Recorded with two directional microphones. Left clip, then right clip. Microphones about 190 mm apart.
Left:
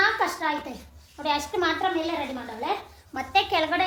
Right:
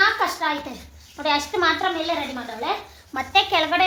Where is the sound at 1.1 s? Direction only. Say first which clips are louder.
Right 4 dB; 30° right (ahead or behind).